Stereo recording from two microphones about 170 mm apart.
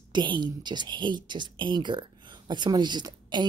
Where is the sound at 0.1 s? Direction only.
25° right (ahead or behind).